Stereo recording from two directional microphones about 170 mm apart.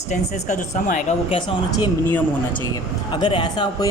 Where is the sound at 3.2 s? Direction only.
25° left (ahead or behind).